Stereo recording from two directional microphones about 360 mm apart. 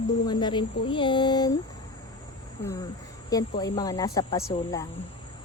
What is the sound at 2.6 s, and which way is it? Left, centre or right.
Speech, centre.